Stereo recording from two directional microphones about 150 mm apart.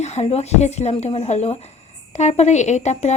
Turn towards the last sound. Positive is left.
turn(degrees=50)  # may be behind; listen again after turning